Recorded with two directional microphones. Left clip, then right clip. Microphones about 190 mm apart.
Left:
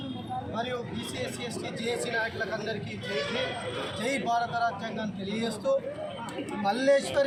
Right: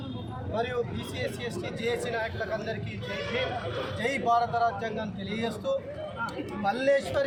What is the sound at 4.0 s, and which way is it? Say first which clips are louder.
Speech: right 3 dB; 10° right (ahead or behind).